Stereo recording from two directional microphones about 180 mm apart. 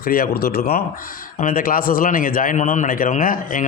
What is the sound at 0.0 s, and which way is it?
A man's voice, 55° left (ahead or behind).